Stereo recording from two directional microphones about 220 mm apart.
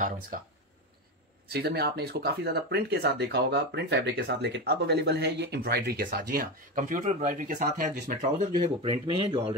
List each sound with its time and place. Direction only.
1.5 s speech: 45° right (ahead or behind)
8.6 s speech: 25° right (ahead or behind)